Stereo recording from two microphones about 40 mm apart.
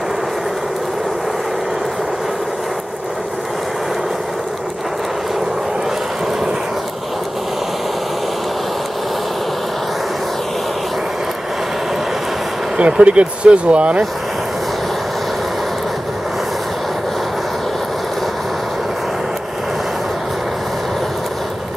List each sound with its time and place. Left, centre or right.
12.7 s speech: right